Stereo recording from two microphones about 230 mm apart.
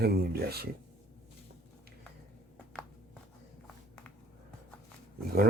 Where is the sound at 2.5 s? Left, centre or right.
Centre.